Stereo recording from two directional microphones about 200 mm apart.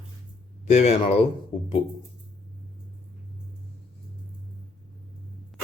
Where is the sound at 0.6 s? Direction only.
35° left (ahead or behind).